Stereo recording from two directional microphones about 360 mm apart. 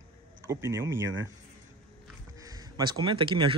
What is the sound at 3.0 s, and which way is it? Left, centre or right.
Speech, centre.